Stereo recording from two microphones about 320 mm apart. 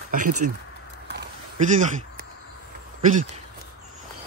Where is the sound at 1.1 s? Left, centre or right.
Right.